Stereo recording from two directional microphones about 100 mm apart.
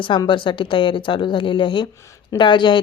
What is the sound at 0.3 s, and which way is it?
A woman's voice, 55° left (ahead or behind).